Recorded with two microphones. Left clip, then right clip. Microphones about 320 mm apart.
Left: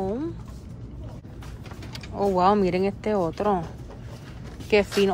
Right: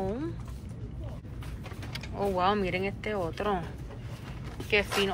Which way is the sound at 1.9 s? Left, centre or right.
Centre.